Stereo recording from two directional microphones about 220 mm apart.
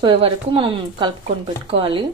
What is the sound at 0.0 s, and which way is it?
Speech, 25° right (ahead or behind).